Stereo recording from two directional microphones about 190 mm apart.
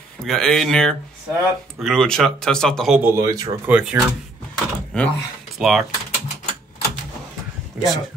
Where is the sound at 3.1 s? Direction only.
20° right (ahead or behind).